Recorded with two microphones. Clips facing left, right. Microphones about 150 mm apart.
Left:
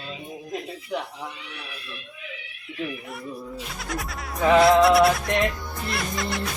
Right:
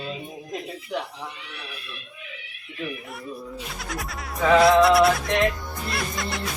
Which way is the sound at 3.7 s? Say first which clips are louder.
Left 2 dB; centre (ahead or behind).